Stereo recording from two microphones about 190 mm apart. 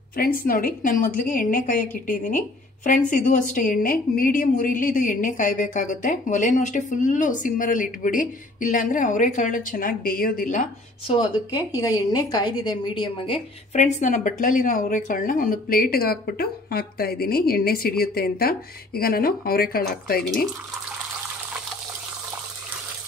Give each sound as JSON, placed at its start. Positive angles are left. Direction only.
{"t": 0.1, "sound": "a woman's voice", "side_deg": 50}
{"t": 11.1, "sound": "a woman's voice", "side_deg": 25}
{"t": 13.9, "sound": "a woman's voice", "side_deg": 40}